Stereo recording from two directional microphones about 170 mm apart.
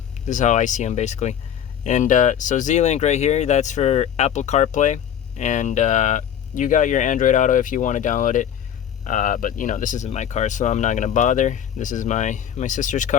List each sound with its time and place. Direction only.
0.3 s speech: 45° left (ahead or behind)